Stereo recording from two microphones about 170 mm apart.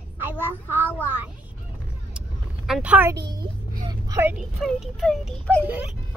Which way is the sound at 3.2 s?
25° right (ahead or behind).